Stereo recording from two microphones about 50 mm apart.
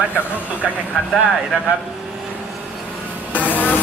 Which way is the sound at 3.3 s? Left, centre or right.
Left.